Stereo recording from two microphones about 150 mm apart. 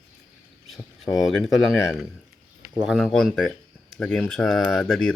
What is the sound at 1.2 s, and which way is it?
Speech, centre (ahead or behind).